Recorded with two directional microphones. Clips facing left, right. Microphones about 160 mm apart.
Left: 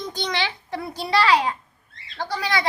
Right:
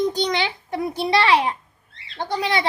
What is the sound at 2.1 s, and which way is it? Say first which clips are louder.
Speech: right 3 dB; 20° right (ahead or behind).